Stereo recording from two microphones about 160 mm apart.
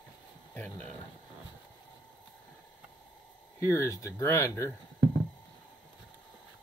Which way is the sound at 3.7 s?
20° left (ahead or behind).